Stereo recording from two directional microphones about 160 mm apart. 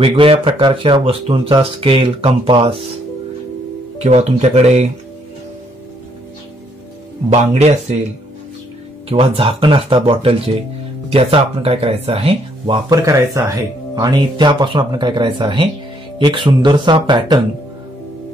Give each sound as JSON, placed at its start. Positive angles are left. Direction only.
{"t": 0.0, "sound": "speech", "side_deg": -35}
{"t": 4.0, "sound": "speech", "side_deg": -45}
{"t": 7.2, "sound": "speech", "side_deg": -45}
{"t": 9.1, "sound": "speech", "side_deg": -35}